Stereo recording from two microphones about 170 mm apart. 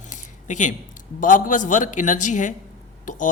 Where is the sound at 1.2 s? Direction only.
50° left (ahead or behind).